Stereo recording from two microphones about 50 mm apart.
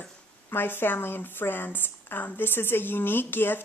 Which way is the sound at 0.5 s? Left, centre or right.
Left.